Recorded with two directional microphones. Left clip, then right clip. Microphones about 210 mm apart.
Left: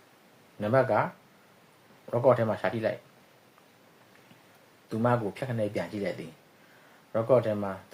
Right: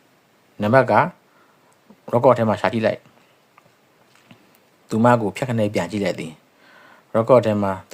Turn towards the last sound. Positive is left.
turn(degrees=-40)  # may be behind; listen again after turning